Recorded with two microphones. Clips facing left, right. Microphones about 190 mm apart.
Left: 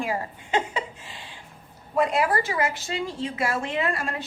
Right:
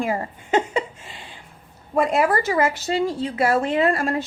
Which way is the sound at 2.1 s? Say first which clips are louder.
Right 4 dB; 40° right (ahead or behind).